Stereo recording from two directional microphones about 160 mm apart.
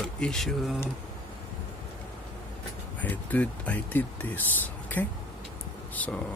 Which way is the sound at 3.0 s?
10° left (ahead or behind).